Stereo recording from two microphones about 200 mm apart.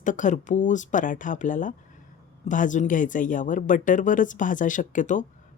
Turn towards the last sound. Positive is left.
turn(degrees=40)  # may be behind; listen again after turning